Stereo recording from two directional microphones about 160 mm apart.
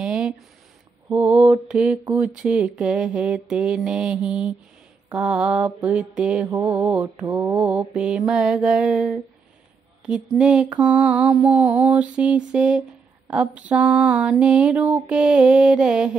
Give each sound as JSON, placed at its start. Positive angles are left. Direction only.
{"t": 0.0, "sound": "a sound", "side_deg": -5}
{"t": 1.0, "sound": "mantra", "side_deg": -10}
{"t": 7.5, "sound": "mantra", "side_deg": -10}
{"t": 10.3, "sound": "mantra", "side_deg": -5}